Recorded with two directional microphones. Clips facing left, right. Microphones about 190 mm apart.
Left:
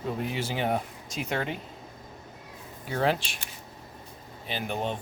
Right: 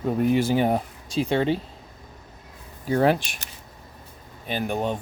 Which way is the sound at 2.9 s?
45° right (ahead or behind).